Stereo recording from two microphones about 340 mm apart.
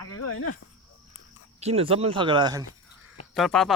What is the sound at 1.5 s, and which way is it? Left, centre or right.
Speech, centre.